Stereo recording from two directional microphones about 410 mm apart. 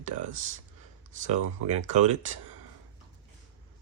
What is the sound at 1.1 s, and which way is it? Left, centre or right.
Speech, centre.